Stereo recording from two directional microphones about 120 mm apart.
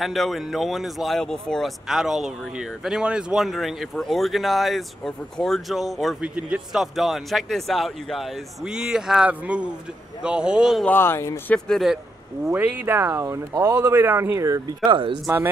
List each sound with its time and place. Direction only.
0.0 s speech: centre (ahead or behind)
10.8 s speech: 15° left (ahead or behind)
11.5 s speech: 5° left (ahead or behind)
12.4 s speech: 15° right (ahead or behind)
14.9 s speech: 45° right (ahead or behind)
15.2 s speech: 15° right (ahead or behind)